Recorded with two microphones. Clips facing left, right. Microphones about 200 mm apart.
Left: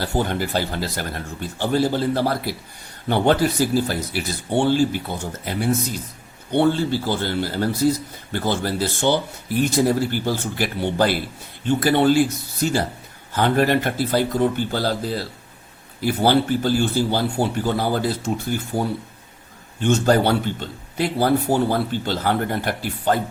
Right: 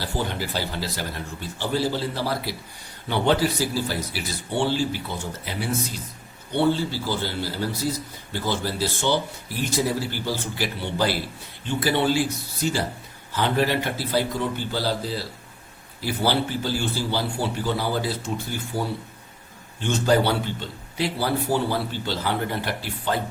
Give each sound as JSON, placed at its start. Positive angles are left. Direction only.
{"t": 0.0, "sound": "a man's voice", "side_deg": 50}
{"t": 13.3, "sound": "a man's voice", "side_deg": 50}